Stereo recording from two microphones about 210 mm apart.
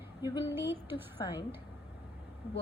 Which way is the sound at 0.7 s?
10° right (ahead or behind).